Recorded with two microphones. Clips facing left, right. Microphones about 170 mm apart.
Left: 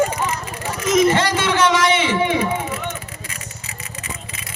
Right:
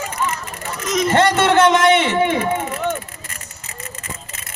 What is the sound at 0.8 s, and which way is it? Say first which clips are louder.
Vehicle: left 5 dB; 5° left (ahead or behind).